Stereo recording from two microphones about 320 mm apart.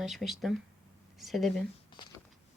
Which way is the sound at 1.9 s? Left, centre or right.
Centre.